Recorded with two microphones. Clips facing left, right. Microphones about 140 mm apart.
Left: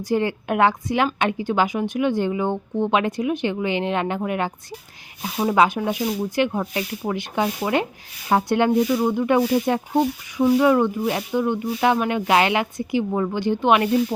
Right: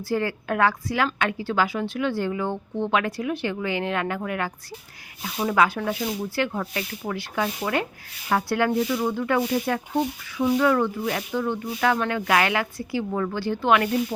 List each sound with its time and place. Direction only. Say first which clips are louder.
0.0 s speech: left 4 dB; 20° left (ahead or behind)